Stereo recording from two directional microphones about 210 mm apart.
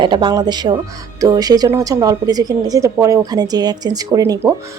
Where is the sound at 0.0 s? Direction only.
20° right (ahead or behind).